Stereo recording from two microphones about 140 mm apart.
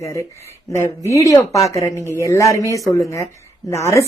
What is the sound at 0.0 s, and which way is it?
Speech, 20° left (ahead or behind).